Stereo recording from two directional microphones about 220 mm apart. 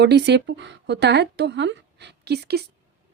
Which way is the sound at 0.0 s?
50° right (ahead or behind).